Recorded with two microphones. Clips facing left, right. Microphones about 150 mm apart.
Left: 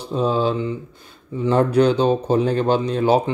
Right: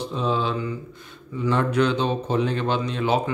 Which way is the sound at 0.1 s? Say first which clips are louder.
Left 7 dB; 40° left (ahead or behind).